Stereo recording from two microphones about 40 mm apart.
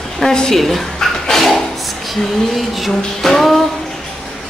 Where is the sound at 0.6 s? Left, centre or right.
Centre.